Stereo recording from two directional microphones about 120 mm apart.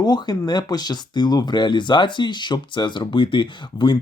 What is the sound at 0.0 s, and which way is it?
Speech, 35° left (ahead or behind).